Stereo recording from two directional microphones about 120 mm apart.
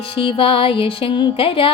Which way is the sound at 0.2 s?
50° left (ahead or behind).